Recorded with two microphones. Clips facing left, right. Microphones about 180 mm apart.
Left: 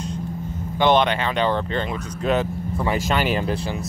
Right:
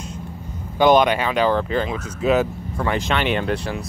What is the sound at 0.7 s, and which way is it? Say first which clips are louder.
Speech: right 3 dB; 10° right (ahead or behind).